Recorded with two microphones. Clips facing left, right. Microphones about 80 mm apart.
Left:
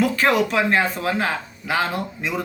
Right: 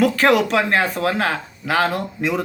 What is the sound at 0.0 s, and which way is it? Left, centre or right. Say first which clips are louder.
Speech: right 3 dB; right.